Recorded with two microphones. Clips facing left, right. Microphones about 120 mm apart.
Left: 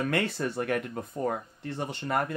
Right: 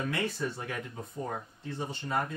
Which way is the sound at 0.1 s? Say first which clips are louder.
Left 4 dB; 65° left (ahead or behind).